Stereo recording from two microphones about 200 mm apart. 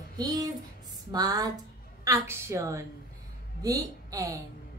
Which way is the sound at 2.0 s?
15° right (ahead or behind).